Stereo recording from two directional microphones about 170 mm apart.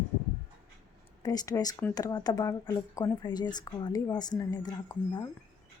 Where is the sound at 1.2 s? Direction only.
20° left (ahead or behind).